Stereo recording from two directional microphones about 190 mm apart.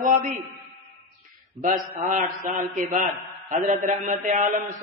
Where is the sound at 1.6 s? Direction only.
45° right (ahead or behind).